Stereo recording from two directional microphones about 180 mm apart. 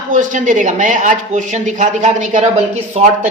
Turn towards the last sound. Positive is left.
turn(degrees=-40)  # may be behind; listen again after turning